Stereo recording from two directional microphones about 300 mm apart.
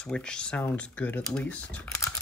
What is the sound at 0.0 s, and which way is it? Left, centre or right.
Speech, centre.